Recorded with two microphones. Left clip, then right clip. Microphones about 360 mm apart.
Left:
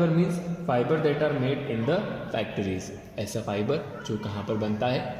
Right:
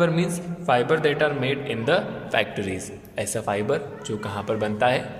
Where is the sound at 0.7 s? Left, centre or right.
Right.